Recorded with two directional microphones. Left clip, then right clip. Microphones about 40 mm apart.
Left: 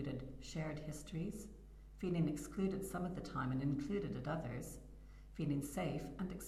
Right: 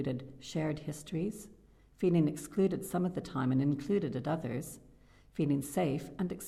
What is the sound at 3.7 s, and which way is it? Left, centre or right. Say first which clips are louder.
Speech: right 9 dB; right.